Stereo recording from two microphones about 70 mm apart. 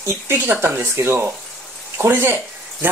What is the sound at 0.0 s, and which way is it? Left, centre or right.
Speech, right.